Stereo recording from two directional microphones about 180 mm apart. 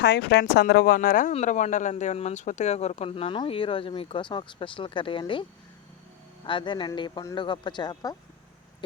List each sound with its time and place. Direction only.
0.0 s a man's voice: 70° left (ahead or behind); by 8.1 s 25° left (ahead or behind)